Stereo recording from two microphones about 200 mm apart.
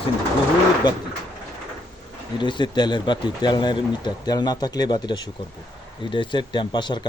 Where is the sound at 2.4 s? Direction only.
25° left (ahead or behind).